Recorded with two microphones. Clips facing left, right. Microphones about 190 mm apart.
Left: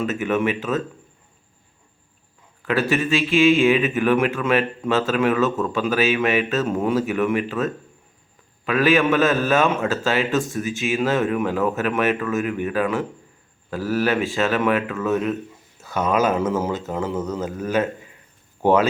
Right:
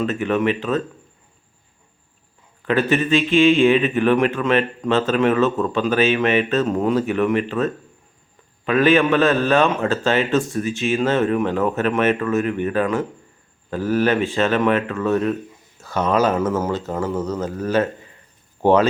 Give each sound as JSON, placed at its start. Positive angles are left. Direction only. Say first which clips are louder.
{"t": 0.0, "sound": "a man's voice", "louder": "right 2 dB", "side_deg": 5}
{"t": 2.9, "sound": "a man's voice", "louder": "right 3 dB", "side_deg": 0}
{"t": 16.1, "sound": "a man's voice", "louder": "right 1 dB", "side_deg": 20}